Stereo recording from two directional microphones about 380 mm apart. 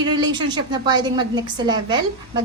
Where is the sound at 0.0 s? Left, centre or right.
Centre.